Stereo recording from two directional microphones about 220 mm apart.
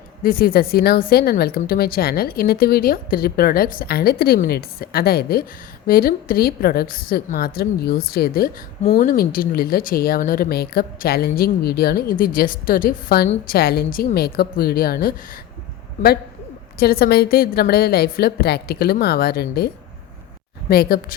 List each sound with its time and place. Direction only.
0.2 s a woman's voice: 40° left (ahead or behind)
8.8 s a woman's voice: 30° left (ahead or behind)
16.7 s a woman's voice: 45° left (ahead or behind)